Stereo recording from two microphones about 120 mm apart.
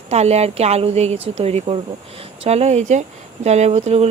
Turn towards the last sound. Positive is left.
turn(degrees=-65)  # may be behind; listen again after turning